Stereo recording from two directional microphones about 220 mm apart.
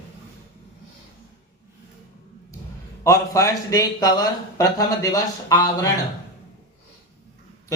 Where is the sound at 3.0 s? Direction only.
15° left (ahead or behind).